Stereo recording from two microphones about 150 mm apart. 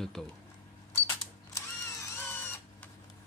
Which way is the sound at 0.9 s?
15° left (ahead or behind).